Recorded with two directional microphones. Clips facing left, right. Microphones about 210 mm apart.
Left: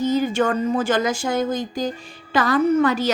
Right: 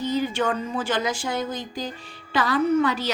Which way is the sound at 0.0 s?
45° left (ahead or behind).